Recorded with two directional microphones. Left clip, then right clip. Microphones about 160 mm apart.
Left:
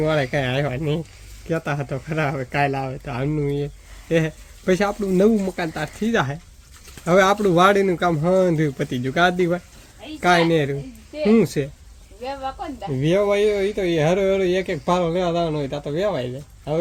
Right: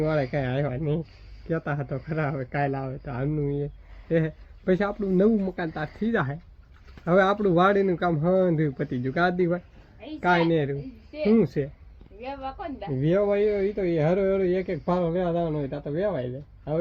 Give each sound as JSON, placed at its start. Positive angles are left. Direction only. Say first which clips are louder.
{"t": 0.2, "sound": "speech", "louder": "left 5 dB", "side_deg": 20}
{"t": 13.0, "sound": "speech", "louder": "left 4 dB", "side_deg": 20}